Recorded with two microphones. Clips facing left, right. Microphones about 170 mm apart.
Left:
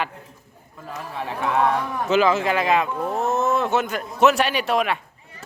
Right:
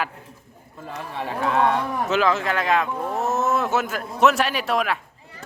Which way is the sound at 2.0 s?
Centre (ahead or behind).